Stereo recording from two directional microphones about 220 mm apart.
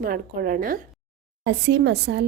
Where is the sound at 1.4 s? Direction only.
50° right (ahead or behind).